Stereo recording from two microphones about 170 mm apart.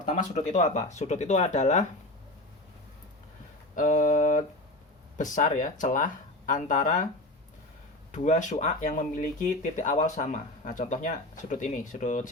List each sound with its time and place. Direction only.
0.0 s speech: 45° left (ahead or behind)
3.8 s speech: 50° left (ahead or behind)
8.1 s speech: 45° left (ahead or behind)